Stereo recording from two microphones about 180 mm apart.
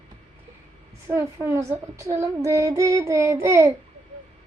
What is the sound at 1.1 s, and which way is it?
Speech, 15° right (ahead or behind).